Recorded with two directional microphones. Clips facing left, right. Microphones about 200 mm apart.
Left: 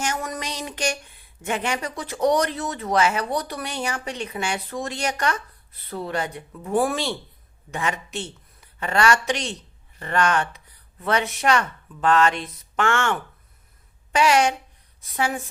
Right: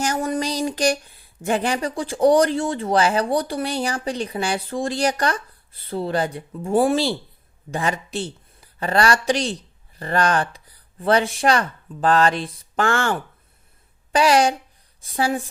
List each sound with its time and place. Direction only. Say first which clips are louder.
0.0 s speech: right 6 dB; 35° right (ahead or behind)